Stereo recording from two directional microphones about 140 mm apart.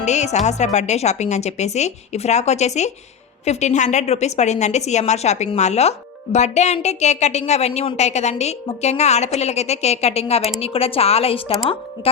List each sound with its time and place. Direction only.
0.0 s a woman's voice: 55° left (ahead or behind)